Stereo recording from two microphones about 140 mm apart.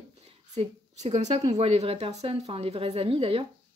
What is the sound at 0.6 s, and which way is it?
Speech, 50° right (ahead or behind).